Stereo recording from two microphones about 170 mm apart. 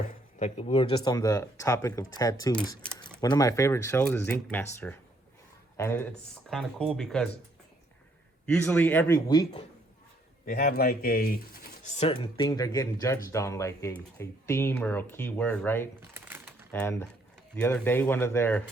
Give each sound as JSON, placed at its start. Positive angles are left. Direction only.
{"t": 0.3, "sound": "speech", "side_deg": 40}
{"t": 6.5, "sound": "speech", "side_deg": 5}
{"t": 8.6, "sound": "speech", "side_deg": 10}
{"t": 10.4, "sound": "speech", "side_deg": 55}
{"t": 11.9, "sound": "speech", "side_deg": 35}
{"t": 12.4, "sound": "speech", "side_deg": 20}
{"t": 16.1, "sound": "a sound", "side_deg": -10}
{"t": 16.7, "sound": "speech", "side_deg": 10}